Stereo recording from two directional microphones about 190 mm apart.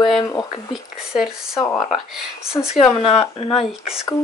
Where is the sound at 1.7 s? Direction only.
Centre (ahead or behind).